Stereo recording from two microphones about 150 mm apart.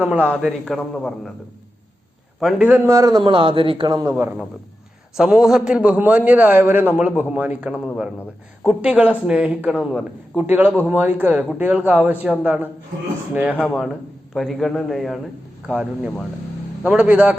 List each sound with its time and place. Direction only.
0.4 s a man's voice: centre (ahead or behind)
2.4 s speech: 5° right (ahead or behind)
2.9 s a man's voice: 25° right (ahead or behind)
5.1 s a man's voice: 5° right (ahead or behind)